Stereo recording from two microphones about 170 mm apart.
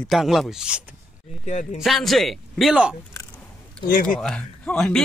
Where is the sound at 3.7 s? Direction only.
60° left (ahead or behind).